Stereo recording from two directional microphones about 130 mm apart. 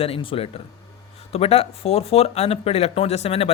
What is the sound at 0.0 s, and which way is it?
Speech, 45° left (ahead or behind).